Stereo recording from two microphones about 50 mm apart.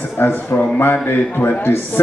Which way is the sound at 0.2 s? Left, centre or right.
Left.